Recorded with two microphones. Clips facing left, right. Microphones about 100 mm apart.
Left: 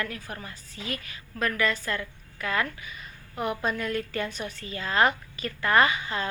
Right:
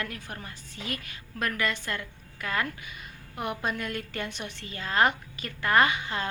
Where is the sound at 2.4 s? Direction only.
35° right (ahead or behind).